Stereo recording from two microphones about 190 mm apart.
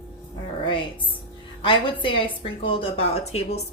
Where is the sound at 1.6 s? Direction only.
25° left (ahead or behind).